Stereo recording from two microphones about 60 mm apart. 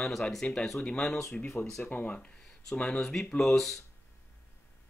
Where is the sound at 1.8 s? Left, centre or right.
Left; by 3.8 s centre.